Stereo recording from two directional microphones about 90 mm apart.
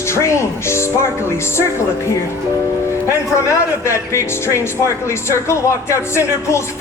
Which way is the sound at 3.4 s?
30° left (ahead or behind).